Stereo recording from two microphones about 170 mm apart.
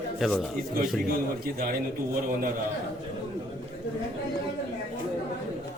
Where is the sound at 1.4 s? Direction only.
60° right (ahead or behind).